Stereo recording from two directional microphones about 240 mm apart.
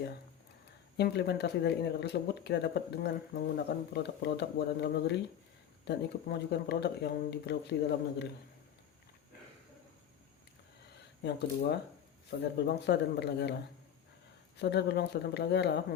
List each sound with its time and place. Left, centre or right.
0.9 s speech: left
11.2 s speech: left
14.6 s speech: left